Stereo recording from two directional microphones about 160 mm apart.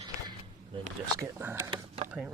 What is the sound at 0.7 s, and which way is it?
Speech, 35° right (ahead or behind).